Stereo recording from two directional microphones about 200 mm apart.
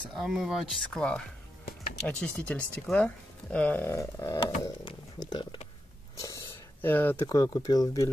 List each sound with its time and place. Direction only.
0.2 s speech: centre (ahead or behind); by 4.5 s 15° left (ahead or behind)
4.6 s a sound: 20° left (ahead or behind)
6.1 s speech: 15° left (ahead or behind)